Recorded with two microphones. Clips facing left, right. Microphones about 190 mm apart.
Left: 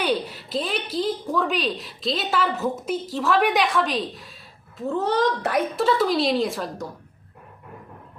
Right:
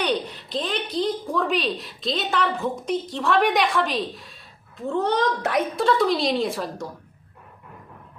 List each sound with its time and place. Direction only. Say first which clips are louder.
0.0 s a woman's voice: left 1 dB; 5° left (ahead or behind)